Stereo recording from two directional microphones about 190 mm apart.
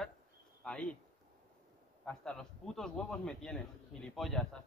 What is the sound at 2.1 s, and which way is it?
A man's voice, 5° left (ahead or behind).